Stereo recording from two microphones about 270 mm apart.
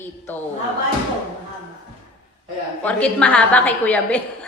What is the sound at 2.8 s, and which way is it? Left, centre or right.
A woman's voice, centre.